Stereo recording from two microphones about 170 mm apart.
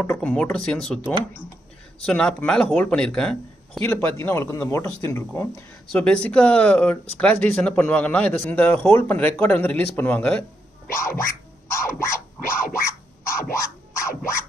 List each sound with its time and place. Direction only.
0.0 s a man's voice: 5° left (ahead or behind)
11.7 s scratching: 15° left (ahead or behind)
13.3 s music: 15° left (ahead or behind)